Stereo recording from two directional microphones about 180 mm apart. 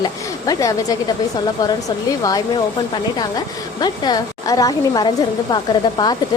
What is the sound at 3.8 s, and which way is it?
A woman's voice, 20° left (ahead or behind).